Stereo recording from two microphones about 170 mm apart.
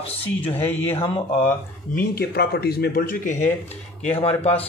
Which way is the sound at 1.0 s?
30° left (ahead or behind).